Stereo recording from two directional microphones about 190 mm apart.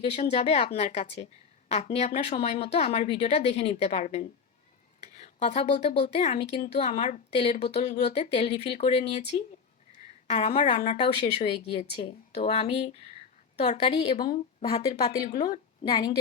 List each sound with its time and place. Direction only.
0.0 s a woman's voice: 35° left (ahead or behind)
10.2 s a woman's voice: 30° left (ahead or behind)